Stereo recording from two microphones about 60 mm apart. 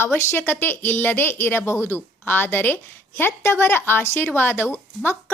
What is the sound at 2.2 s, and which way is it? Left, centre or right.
Speech, left.